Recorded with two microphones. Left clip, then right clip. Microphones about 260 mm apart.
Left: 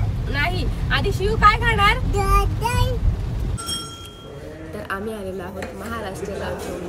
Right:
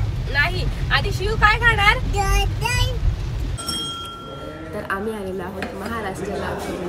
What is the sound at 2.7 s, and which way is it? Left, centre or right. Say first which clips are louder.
Speech: even; centre.